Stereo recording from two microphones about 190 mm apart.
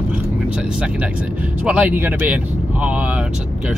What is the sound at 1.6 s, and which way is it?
Speech, 5° right (ahead or behind).